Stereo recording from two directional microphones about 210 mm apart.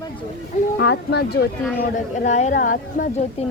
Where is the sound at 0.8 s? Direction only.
50° left (ahead or behind).